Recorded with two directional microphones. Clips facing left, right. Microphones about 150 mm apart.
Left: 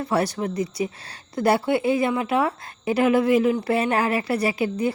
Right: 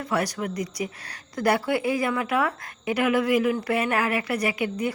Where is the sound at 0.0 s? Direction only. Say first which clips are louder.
Left 3 dB; 30° left (ahead or behind).